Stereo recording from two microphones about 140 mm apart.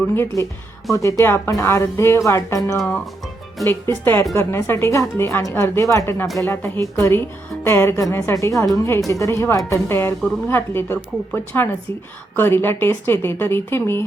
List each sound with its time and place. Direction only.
0.0 s a woman's voice: 15° left (ahead or behind)